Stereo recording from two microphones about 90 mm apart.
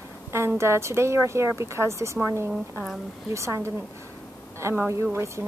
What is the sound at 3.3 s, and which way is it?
Speech, 35° right (ahead or behind).